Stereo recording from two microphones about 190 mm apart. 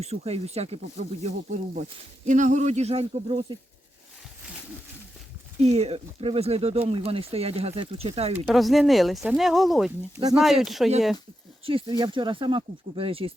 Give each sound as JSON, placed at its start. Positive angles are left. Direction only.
{"t": 0.0, "sound": "speech", "side_deg": -35}
{"t": 5.5, "sound": "speech", "side_deg": -35}
{"t": 8.4, "sound": "speech", "side_deg": 0}
{"t": 11.6, "sound": "speech", "side_deg": -25}